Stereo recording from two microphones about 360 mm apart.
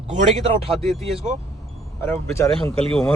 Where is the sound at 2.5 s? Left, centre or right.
Centre.